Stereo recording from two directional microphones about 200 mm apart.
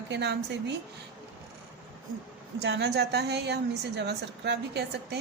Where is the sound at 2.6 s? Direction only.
55° right (ahead or behind).